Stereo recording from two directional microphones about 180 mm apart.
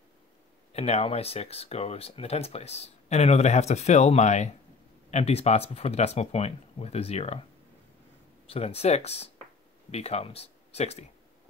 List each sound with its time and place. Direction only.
0.7 s speech: 35° left (ahead or behind)
8.5 s speech: 35° left (ahead or behind)